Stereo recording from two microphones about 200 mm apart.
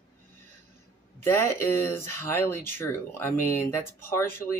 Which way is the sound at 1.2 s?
10° left (ahead or behind).